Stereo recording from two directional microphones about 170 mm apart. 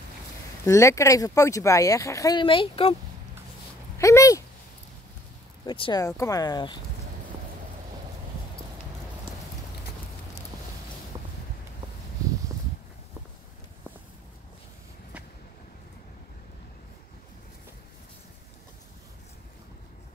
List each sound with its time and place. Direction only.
0.7 s speech: 15° left (ahead or behind); by 3.0 s 35° left (ahead or behind)
4.0 s speech: 20° left (ahead or behind)
5.7 s speech: 25° left (ahead or behind)
11.1 s a sound: 25° right (ahead or behind)